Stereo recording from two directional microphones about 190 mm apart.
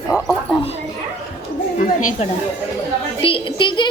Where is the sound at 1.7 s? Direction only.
45° left (ahead or behind).